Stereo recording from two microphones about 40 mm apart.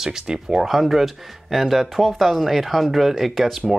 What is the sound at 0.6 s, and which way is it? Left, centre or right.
Speech, centre.